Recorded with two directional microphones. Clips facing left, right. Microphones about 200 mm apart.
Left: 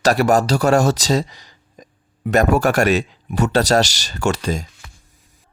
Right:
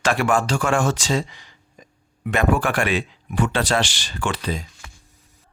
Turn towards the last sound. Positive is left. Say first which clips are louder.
# left 5 dB
turn(degrees=45)  # may be behind; listen again after turning